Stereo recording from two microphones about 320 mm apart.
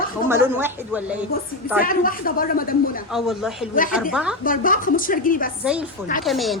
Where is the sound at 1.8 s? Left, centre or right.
Left.